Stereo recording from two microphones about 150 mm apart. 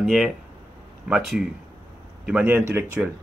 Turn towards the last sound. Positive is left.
turn(degrees=-15)  # may be behind; listen again after turning